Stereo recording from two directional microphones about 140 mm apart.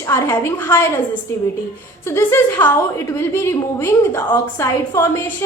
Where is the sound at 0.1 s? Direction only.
15° left (ahead or behind).